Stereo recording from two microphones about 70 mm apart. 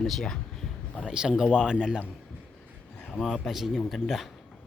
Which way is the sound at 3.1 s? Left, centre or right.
Centre.